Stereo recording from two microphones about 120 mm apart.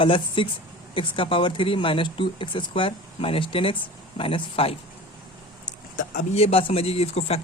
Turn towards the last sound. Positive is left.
turn(degrees=60)  # may be behind; listen again after turning